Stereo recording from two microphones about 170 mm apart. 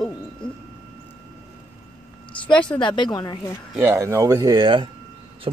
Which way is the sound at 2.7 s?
30° left (ahead or behind).